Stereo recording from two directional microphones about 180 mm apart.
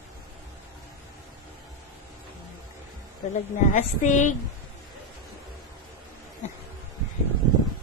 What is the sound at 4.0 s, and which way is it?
Speech, 45° left (ahead or behind).